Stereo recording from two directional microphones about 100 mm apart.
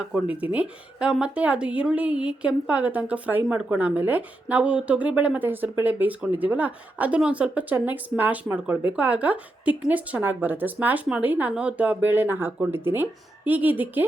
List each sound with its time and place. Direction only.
0.0 s speech: 10° right (ahead or behind)